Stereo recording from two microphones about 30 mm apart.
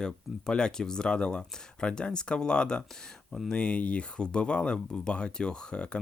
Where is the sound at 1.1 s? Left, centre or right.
Left.